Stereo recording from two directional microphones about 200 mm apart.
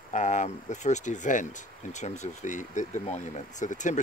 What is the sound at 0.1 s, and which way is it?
Speech, 40° left (ahead or behind).